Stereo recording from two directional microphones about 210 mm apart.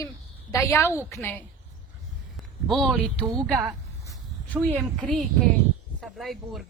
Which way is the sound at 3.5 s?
15° right (ahead or behind).